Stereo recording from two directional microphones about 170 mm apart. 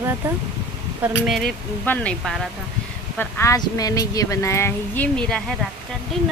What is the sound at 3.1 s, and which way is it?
Speech, 15° left (ahead or behind).